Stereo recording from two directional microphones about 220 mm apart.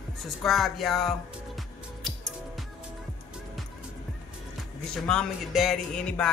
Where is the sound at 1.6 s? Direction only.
Centre (ahead or behind).